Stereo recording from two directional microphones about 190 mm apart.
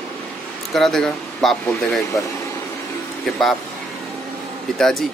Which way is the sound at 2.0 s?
15° left (ahead or behind).